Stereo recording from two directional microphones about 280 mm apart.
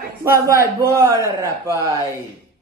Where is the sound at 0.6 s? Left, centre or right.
Centre.